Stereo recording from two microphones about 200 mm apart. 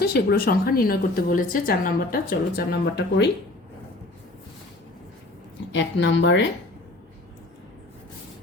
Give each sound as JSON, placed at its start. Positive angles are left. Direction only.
{"t": 0.0, "sound": "a woman's voice", "side_deg": 50}
{"t": 5.7, "sound": "speech", "side_deg": 65}